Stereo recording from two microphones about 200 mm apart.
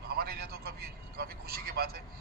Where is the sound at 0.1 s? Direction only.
50° right (ahead or behind).